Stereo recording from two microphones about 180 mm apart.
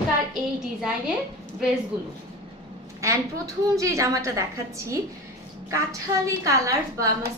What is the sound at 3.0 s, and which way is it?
A woman's voice, 15° right (ahead or behind).